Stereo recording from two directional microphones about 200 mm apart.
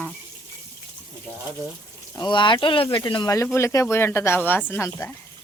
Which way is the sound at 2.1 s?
20° left (ahead or behind).